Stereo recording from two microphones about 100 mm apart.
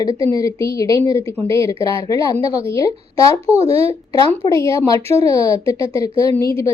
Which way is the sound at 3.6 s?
75° right (ahead or behind).